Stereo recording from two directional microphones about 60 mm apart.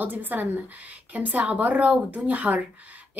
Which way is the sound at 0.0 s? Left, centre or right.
Right.